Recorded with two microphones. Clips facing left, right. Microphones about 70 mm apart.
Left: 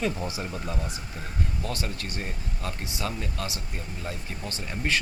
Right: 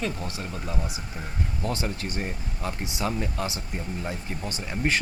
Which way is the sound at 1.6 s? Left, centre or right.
Right.